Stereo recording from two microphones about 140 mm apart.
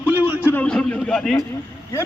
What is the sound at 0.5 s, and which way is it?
Speech, 5° left (ahead or behind).